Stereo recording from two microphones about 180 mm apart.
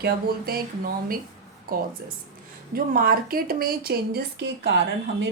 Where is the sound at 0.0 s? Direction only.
60° right (ahead or behind).